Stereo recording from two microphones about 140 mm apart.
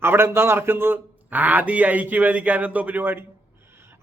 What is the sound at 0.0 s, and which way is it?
A man's voice, 15° right (ahead or behind).